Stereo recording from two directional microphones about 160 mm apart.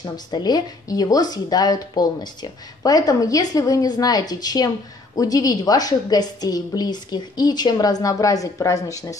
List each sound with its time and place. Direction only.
0.0 s speech: 25° left (ahead or behind)